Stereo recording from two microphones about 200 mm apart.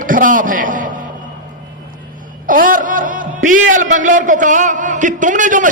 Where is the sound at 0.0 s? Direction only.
40° right (ahead or behind).